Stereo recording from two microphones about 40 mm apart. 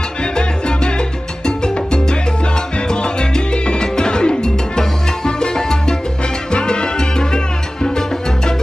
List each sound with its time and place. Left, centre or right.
0.2 s salsa music: left